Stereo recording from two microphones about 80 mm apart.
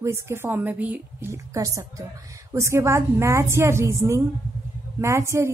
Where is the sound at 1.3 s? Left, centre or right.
Right.